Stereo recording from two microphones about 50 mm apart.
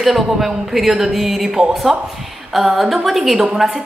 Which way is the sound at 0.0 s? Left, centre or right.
Centre.